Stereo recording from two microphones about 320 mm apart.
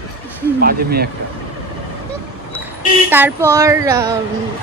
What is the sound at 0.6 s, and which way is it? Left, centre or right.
Speech, right.